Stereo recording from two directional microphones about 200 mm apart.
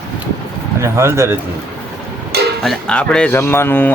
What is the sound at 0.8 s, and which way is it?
Speech, 15° right (ahead or behind).